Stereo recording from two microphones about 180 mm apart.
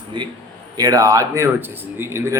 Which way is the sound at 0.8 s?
20° right (ahead or behind).